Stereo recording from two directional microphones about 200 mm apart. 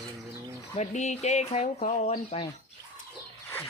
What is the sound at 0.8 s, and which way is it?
Speech, 35° left (ahead or behind).